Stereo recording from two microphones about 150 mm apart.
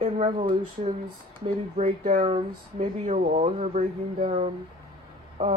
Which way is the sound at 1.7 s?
55° right (ahead or behind).